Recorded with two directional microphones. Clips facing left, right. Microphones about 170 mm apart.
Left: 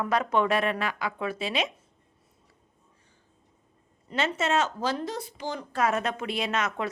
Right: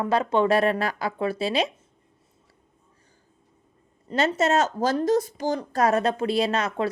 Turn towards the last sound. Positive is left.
turn(degrees=-35)  # may be behind; listen again after turning